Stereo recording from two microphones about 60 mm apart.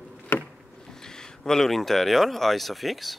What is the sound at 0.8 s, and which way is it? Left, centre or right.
Speech, centre.